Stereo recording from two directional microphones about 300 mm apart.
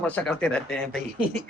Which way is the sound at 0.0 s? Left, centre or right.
Centre.